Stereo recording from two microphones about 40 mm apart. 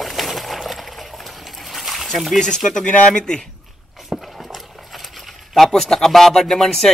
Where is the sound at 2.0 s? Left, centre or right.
Centre.